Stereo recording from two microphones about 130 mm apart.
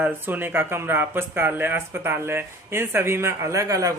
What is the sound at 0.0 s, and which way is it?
Speech, 15° right (ahead or behind).